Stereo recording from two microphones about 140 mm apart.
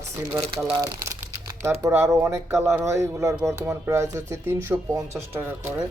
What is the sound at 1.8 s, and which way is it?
Speech, 20° right (ahead or behind).